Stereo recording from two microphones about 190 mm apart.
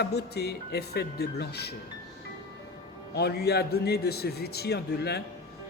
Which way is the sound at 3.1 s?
60° left (ahead or behind).